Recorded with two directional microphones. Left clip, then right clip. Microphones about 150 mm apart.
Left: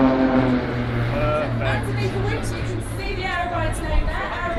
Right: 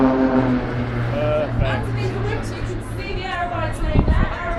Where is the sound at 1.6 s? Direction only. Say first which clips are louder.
Even; 50° right (ahead or behind).